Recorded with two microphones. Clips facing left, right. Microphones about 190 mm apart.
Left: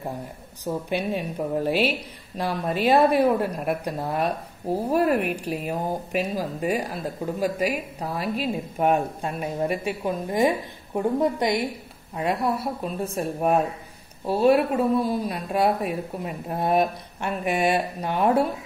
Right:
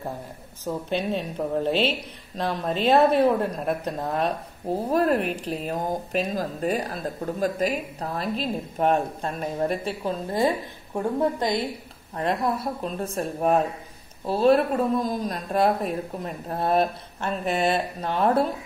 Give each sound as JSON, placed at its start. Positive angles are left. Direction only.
{"t": 0.7, "sound": "a woman's voice", "side_deg": 10}